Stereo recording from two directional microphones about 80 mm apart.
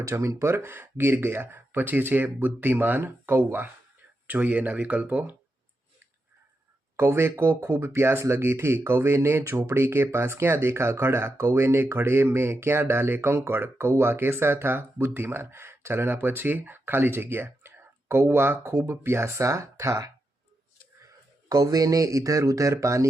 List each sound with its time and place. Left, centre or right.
0.0 s speech: right
6.9 s speech: right
21.5 s speech: right